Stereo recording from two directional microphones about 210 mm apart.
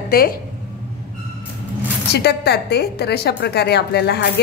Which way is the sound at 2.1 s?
50° left (ahead or behind).